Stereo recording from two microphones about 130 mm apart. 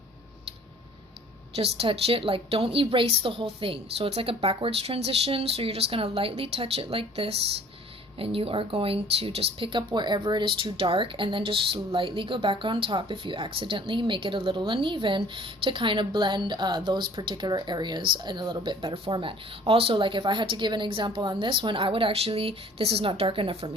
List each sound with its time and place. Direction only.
1.5 s a woman's voice: 50° right (ahead or behind)